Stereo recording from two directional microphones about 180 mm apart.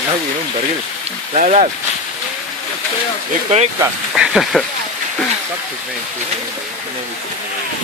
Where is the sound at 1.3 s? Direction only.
40° right (ahead or behind).